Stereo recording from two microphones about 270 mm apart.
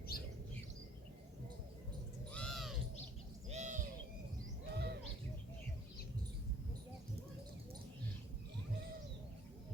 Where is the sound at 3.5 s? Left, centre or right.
Right.